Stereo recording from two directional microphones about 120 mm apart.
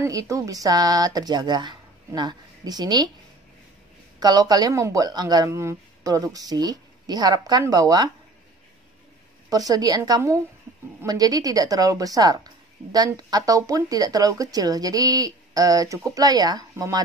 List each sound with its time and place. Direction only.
0.0 s a woman's voice: 30° right (ahead or behind)
4.2 s a woman's voice: 35° right (ahead or behind)
9.5 s a woman's voice: 30° right (ahead or behind)